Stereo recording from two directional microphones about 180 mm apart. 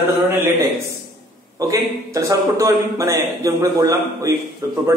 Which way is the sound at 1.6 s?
20° right (ahead or behind).